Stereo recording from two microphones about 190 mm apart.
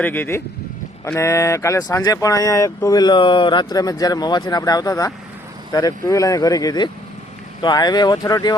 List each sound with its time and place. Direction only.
0.0 s speech: 10° left (ahead or behind)